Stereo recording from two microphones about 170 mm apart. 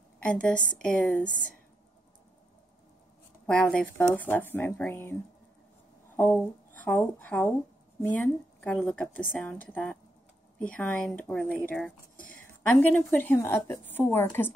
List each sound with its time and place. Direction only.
0.3 s a woman's voice: 5° left (ahead or behind)
3.4 s a woman's voice: 5° left (ahead or behind)
6.1 s a woman's voice: 10° left (ahead or behind)